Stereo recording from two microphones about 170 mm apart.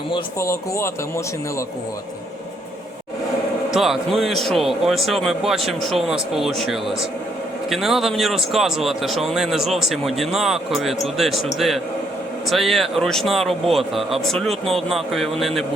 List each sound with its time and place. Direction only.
0.3 s speech: 15° left (ahead or behind)
3.7 s a man's voice: centre (ahead or behind)